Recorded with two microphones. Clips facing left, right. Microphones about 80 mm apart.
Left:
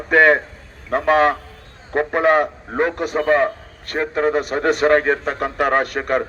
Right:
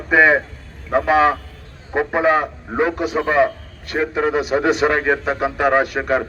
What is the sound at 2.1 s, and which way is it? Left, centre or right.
Speech, left.